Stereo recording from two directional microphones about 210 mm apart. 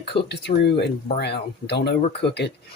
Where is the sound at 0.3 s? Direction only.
55° left (ahead or behind).